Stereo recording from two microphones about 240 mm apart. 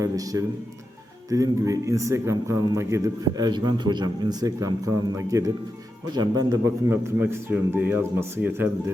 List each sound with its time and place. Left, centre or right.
0.0 s a man's voice: centre